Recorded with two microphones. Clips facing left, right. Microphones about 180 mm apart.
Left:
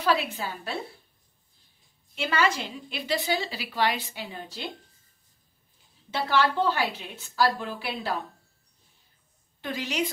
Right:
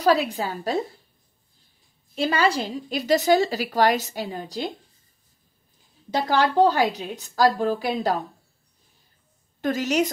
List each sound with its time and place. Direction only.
0.0 s a woman's voice: 40° right (ahead or behind)
2.1 s a woman's voice: 35° right (ahead or behind)
6.0 s a woman's voice: 40° right (ahead or behind)
9.6 s a woman's voice: 45° right (ahead or behind)